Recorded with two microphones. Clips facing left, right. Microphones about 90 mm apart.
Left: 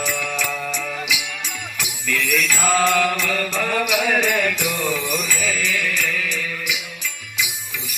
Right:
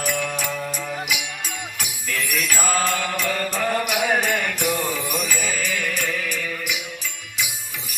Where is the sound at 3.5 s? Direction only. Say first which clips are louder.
Left 1 dB; 40° right (ahead or behind).